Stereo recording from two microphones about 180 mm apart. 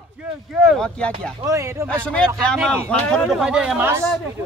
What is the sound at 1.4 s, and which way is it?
Speech, 15° right (ahead or behind).